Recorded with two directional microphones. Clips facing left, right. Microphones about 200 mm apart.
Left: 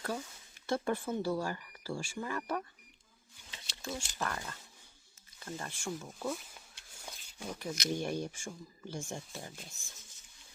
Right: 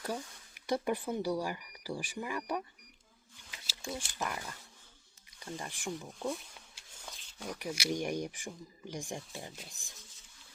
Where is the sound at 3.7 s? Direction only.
5° right (ahead or behind).